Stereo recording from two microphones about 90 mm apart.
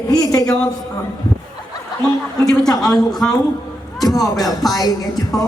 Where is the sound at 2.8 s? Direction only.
5° left (ahead or behind).